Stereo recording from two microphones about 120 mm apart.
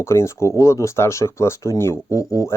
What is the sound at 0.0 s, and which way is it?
Speech, 25° left (ahead or behind).